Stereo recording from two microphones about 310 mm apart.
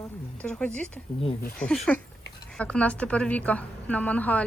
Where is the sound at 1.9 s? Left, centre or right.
Centre.